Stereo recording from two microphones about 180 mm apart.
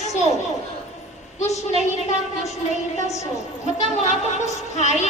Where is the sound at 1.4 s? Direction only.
40° left (ahead or behind).